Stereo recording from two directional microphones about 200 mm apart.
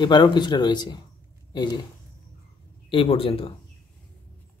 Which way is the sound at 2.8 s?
25° left (ahead or behind).